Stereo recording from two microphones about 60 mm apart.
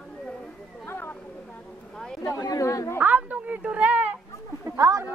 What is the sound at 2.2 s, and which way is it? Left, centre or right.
Speech, left.